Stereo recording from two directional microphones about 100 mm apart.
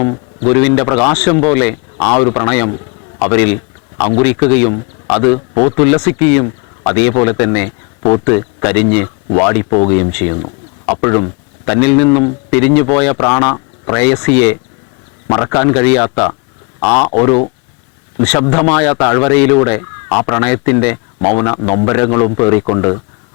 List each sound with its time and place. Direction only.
0.0 s speech: 20° left (ahead or behind)